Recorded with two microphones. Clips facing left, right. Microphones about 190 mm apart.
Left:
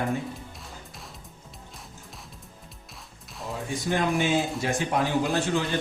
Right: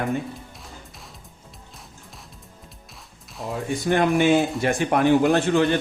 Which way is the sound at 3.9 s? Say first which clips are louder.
Right 6 dB; 60° right (ahead or behind).